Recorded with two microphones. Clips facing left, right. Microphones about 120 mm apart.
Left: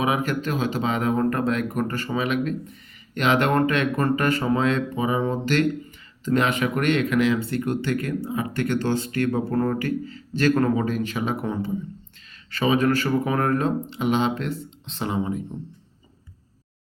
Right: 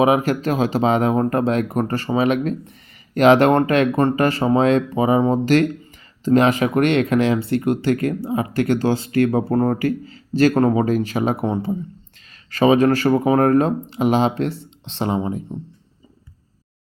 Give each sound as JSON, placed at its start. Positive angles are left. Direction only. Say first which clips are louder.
{"t": 0.0, "sound": "speech", "louder": "right 7 dB", "side_deg": -35}